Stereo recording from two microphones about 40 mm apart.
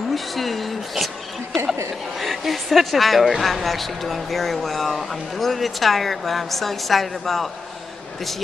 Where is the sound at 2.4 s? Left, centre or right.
Centre.